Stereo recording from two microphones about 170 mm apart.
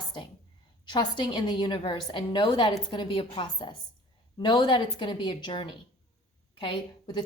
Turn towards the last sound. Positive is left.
turn(degrees=25)  # may be behind; listen again after turning